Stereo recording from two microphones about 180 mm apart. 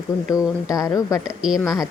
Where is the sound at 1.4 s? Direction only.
Centre (ahead or behind).